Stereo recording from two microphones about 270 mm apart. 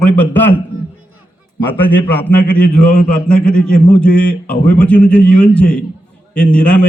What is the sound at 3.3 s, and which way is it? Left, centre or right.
A man's voice, centre.